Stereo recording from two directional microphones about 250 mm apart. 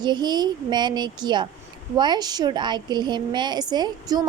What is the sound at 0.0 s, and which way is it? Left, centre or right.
A woman's voice, centre.